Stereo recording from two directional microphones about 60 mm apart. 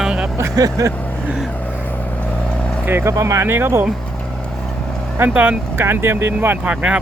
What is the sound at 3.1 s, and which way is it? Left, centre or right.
Speech, right.